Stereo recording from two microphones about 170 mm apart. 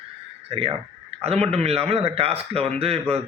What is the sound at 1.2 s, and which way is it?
A man's voice, 35° right (ahead or behind).